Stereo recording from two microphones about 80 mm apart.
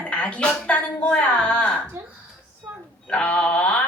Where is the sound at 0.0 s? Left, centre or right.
Centre.